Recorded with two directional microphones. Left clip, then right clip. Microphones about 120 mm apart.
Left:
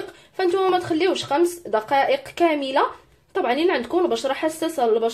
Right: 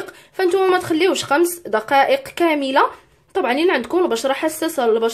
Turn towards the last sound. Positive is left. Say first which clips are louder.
# right 3 dB
turn(degrees=-35)  # may be behind; listen again after turning